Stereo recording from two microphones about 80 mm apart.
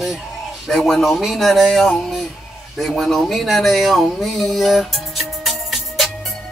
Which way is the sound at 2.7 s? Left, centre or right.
Centre.